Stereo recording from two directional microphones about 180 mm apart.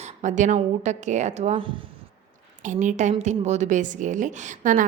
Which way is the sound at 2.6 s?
45° right (ahead or behind).